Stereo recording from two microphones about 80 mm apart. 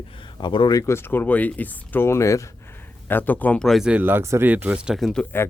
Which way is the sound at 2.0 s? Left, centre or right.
Left.